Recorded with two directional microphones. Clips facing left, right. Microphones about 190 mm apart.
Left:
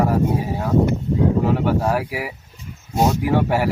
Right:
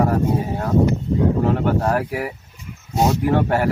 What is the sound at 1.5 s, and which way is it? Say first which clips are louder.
Speech: even; 5° left (ahead or behind).